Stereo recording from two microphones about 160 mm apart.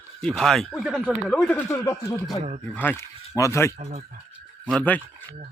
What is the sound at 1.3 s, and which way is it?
Speech, 5° left (ahead or behind).